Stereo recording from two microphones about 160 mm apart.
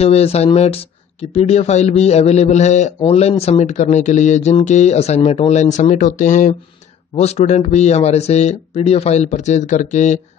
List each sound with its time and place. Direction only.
0.0 s speech: 40° left (ahead or behind)